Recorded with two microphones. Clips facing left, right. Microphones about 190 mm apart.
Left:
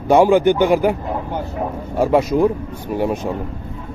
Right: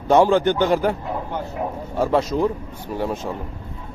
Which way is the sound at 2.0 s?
10° left (ahead or behind).